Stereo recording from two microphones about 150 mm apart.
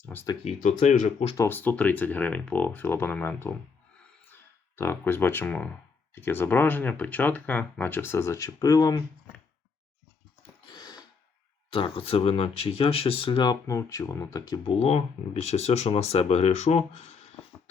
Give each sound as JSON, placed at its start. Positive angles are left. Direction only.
{"t": 0.0, "sound": "a sound", "side_deg": 10}
{"t": 0.4, "sound": "speech", "side_deg": 50}
{"t": 1.4, "sound": "speech", "side_deg": 10}
{"t": 4.8, "sound": "speech", "side_deg": 15}
{"t": 10.7, "sound": "a sound", "side_deg": 25}
{"t": 11.7, "sound": "speech", "side_deg": 35}
{"t": 14.8, "sound": "speech", "side_deg": 45}